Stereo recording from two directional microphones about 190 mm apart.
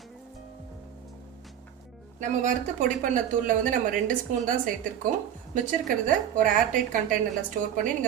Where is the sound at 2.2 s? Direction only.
40° right (ahead or behind).